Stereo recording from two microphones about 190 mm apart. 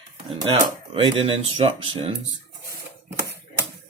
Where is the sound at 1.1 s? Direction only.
25° right (ahead or behind).